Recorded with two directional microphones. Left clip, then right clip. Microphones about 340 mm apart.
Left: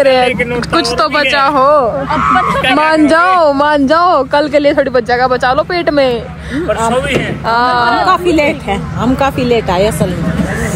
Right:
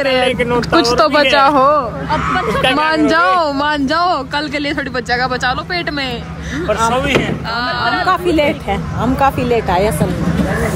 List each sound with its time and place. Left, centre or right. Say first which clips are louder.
0.7 s a woman's voice: even; centre
7.5 s a woman's voice: left 7 dB; centre
9.2 s a woman's voice: left 1 dB; centre